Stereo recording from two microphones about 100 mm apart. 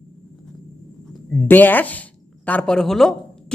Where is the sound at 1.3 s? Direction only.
20° left (ahead or behind).